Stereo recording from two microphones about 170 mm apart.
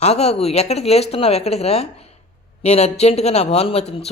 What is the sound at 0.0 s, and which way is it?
A man's voice, 40° left (ahead or behind).